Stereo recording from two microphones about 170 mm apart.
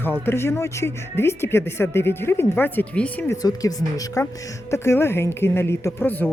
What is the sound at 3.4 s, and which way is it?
Speech, 20° left (ahead or behind).